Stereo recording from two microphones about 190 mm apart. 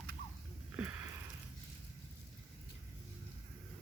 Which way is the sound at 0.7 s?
10° right (ahead or behind).